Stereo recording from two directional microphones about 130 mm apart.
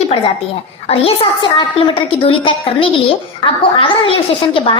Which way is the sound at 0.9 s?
50° left (ahead or behind).